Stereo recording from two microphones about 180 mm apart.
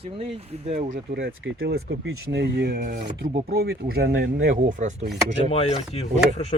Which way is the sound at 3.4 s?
60° right (ahead or behind).